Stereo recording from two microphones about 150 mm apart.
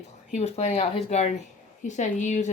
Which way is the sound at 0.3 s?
45° left (ahead or behind).